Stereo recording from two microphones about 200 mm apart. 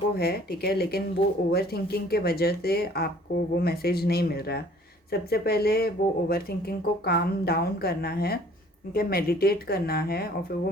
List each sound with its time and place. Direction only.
0.2 s speech: 50° left (ahead or behind)